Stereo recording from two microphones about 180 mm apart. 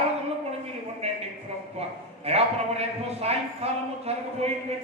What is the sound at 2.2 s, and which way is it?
A man's voice, 35° right (ahead or behind).